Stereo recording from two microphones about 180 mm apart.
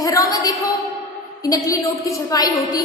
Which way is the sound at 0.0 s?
20° left (ahead or behind).